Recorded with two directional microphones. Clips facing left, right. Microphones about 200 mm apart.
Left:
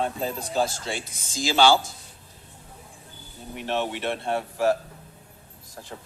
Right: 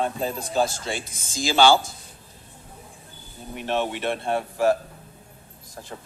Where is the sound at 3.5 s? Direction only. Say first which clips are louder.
Right 2 dB; 50° right (ahead or behind).